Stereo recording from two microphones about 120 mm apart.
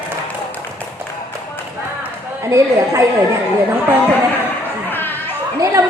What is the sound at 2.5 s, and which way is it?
Speech, 25° right (ahead or behind).